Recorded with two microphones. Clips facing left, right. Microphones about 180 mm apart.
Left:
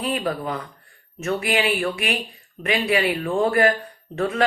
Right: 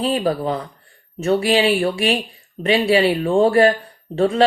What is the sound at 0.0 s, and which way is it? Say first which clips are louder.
A man's voice: right 5 dB; 30° right (ahead or behind).